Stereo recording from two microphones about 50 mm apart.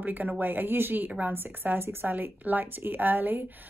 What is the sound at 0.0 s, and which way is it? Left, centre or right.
A woman's voice, right.